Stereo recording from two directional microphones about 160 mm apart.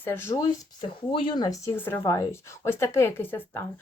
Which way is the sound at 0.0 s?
15° left (ahead or behind).